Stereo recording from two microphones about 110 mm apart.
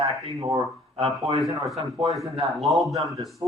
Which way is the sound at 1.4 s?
Centre (ahead or behind).